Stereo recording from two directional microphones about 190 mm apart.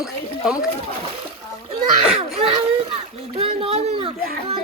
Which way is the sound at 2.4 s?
30° right (ahead or behind).